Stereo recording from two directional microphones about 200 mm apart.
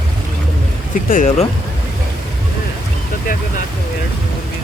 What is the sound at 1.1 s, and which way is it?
Speech, 40° left (ahead or behind).